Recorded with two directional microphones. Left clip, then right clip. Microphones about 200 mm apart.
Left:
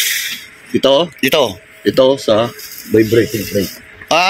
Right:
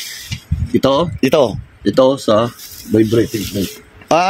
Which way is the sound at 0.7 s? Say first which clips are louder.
Left 2 dB; 70° right (ahead or behind).